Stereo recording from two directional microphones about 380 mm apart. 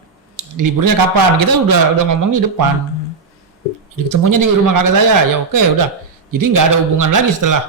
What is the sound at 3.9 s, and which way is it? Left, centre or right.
A man's voice, right.